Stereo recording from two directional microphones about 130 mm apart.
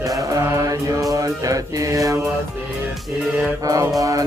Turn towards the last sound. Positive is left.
turn(degrees=-25)  # may be behind; listen again after turning